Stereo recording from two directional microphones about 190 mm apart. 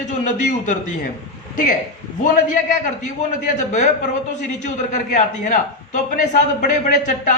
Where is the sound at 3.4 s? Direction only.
40° left (ahead or behind).